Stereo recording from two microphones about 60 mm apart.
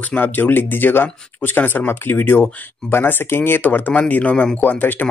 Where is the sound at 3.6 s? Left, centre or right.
Left.